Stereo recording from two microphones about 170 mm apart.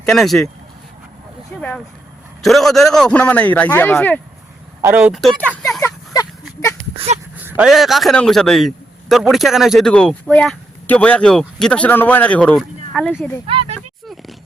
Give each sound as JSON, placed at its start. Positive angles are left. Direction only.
{"t": 0.0, "sound": "a man's voice", "side_deg": 5}
{"t": 2.4, "sound": "a man's voice", "side_deg": 0}
{"t": 4.8, "sound": "speech", "side_deg": -10}
{"t": 5.2, "sound": "a man's voice", "side_deg": 5}
{"t": 6.9, "sound": "a sound", "side_deg": -35}
{"t": 7.3, "sound": "a sound", "side_deg": -10}
{"t": 7.7, "sound": "a man's voice", "side_deg": 0}
{"t": 13.5, "sound": "speech", "side_deg": -30}
{"t": 13.7, "sound": "a sound", "side_deg": 0}